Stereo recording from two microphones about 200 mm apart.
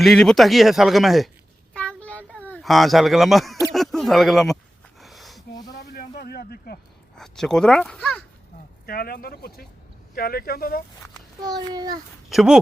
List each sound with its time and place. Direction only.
0.0 s speech: centre (ahead or behind)
1.7 s a sound: 5° left (ahead or behind)
3.7 s speech: centre (ahead or behind)
4.9 s a sound: centre (ahead or behind)
5.7 s a sound: 50° left (ahead or behind)
7.2 s speech: 5° left (ahead or behind)
8.9 s speech: 50° left (ahead or behind)
11.3 s a child's voice: 20° right (ahead or behind)
12.3 s speech: centre (ahead or behind)